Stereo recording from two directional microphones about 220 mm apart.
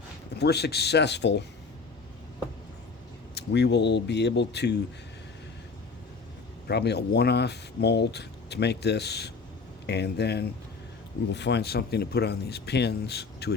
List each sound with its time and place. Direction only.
0.3 s speech: 50° left (ahead or behind)
3.3 s speech: 50° left (ahead or behind)
6.7 s speech: 50° left (ahead or behind)